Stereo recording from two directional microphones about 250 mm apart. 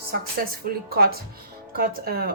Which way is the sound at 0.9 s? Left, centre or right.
Right.